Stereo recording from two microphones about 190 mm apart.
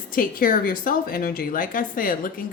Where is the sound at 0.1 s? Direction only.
50° left (ahead or behind).